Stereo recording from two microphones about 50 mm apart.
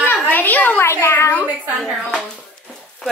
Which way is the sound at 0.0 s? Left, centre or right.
Left.